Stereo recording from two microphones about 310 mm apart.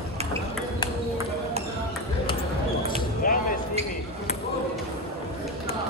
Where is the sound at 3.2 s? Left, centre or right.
Left.